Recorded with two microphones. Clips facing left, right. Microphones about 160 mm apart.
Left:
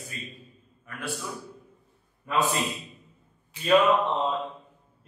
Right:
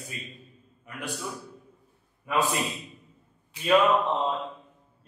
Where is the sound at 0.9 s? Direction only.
20° right (ahead or behind).